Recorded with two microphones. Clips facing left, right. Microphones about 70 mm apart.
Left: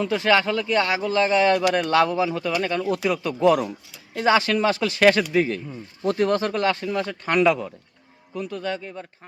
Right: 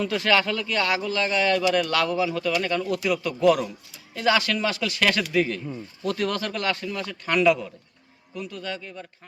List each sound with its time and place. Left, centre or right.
0.0 s a man's voice: left